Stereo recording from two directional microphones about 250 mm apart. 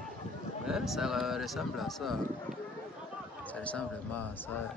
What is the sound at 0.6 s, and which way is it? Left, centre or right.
Speech, centre.